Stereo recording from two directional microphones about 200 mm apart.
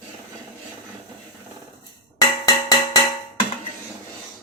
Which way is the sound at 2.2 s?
15° left (ahead or behind).